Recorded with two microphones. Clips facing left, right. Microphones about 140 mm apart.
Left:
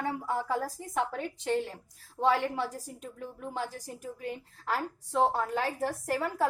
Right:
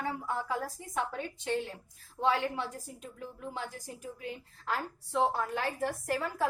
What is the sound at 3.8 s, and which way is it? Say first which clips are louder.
A woman's voice: left 3 dB; 40° left (ahead or behind).